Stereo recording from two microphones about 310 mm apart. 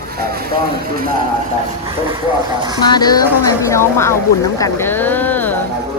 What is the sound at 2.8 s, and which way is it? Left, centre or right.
A woman's voice, centre.